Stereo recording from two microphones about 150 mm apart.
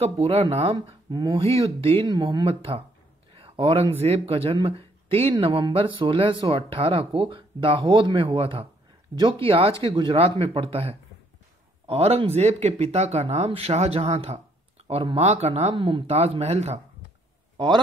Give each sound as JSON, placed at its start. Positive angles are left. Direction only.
{"t": 0.0, "sound": "speech", "side_deg": -45}
{"t": 0.7, "sound": "speech", "side_deg": -30}
{"t": 3.3, "sound": "a sound", "side_deg": -35}
{"t": 4.0, "sound": "speech", "side_deg": -40}